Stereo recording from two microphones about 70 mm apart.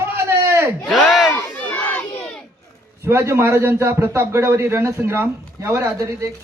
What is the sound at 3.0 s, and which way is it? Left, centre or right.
A man's voice, right.